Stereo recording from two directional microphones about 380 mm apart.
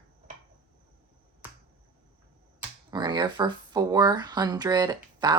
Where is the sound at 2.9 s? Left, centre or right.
Centre.